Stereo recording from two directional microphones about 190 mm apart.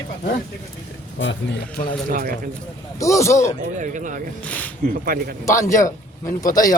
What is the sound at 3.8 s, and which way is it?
Speech, 40° right (ahead or behind).